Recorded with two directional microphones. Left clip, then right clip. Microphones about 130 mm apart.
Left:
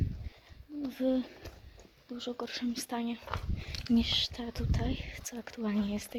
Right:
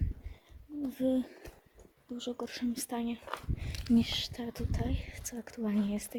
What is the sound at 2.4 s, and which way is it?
Speech, 35° right (ahead or behind).